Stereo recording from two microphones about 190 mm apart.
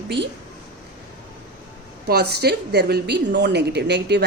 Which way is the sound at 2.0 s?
55° right (ahead or behind).